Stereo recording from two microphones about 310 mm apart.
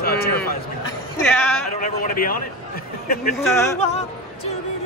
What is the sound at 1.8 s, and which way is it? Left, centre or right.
Speech, left.